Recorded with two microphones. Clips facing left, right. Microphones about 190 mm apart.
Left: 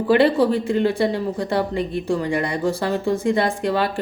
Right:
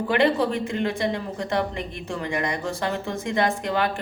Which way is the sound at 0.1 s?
35° left (ahead or behind).